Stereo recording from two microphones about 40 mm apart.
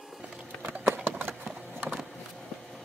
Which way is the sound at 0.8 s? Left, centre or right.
Right.